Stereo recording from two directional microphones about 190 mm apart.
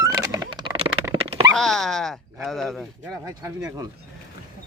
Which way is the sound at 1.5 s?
5° left (ahead or behind).